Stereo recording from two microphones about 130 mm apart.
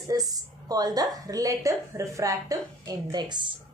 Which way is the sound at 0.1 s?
30° right (ahead or behind).